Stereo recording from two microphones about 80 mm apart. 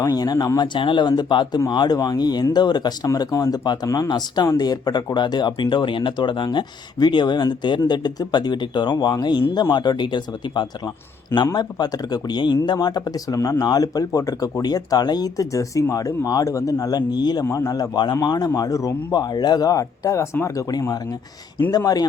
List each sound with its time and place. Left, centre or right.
0.0 s speech: left
0.7 s speech: left
3.2 s speech: left
3.8 s speech: left
4.4 s speech: left
11.5 s speech: left
14.6 s speech: left
17.4 s speech: left
19.1 s speech: left
21.7 s speech: left